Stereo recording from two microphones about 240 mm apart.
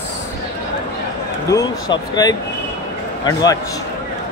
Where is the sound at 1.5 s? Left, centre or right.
Centre.